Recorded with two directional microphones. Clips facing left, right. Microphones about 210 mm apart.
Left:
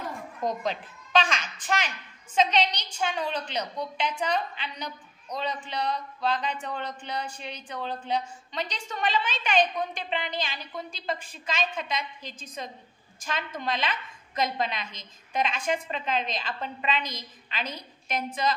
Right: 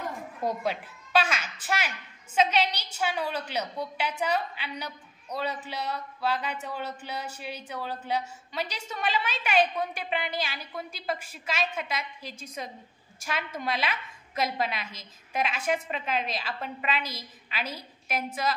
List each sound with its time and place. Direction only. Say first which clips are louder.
0.4 s a woman's voice: even; 10° right (ahead or behind)